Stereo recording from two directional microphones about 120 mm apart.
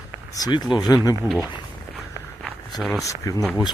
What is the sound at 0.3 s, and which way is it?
Speech, 35° left (ahead or behind).